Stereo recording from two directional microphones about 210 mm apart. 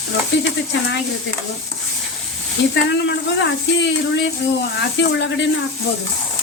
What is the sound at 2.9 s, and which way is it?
Speech, 55° left (ahead or behind).